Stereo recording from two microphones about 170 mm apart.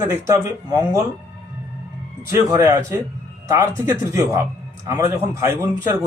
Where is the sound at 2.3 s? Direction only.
15° right (ahead or behind).